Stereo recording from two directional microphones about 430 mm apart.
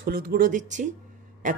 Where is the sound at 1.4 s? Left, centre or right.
Centre.